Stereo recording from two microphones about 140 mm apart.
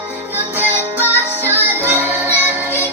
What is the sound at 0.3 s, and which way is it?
Music, 15° right (ahead or behind).